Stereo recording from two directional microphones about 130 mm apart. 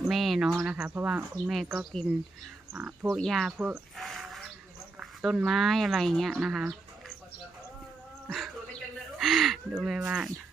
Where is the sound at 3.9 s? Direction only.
Centre (ahead or behind).